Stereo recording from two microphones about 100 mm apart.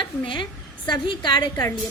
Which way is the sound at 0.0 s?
50° left (ahead or behind).